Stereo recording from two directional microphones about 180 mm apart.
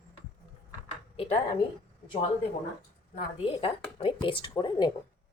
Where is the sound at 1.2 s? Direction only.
35° left (ahead or behind).